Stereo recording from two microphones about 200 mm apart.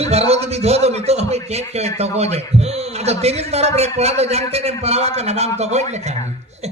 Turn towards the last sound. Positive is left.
turn(degrees=-35)  # may be behind; listen again after turning